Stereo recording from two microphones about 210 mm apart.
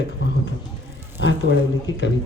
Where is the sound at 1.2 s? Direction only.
60° left (ahead or behind).